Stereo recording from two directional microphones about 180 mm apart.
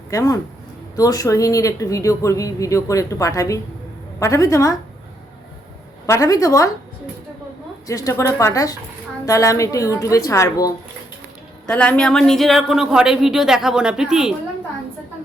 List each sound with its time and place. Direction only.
0.1 s a woman's voice: 20° left (ahead or behind)
6.1 s a woman's voice: 20° left (ahead or behind)
7.9 s a woman's voice: 20° left (ahead or behind)
11.6 s speech: 5° left (ahead or behind)